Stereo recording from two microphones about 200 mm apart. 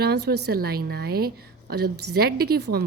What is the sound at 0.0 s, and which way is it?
A woman's voice, 55° right (ahead or behind).